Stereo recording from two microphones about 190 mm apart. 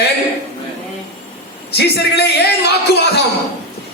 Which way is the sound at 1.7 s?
60° left (ahead or behind).